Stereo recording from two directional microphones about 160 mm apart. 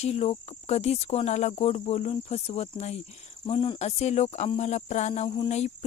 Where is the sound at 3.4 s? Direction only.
30° left (ahead or behind).